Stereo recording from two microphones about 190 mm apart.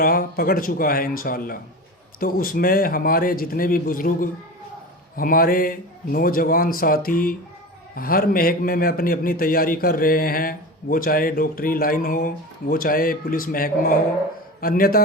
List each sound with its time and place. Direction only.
0.0 s a man's voice: 50° left (ahead or behind)